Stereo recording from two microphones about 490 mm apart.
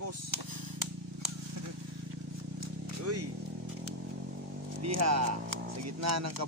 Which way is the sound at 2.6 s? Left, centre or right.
Right.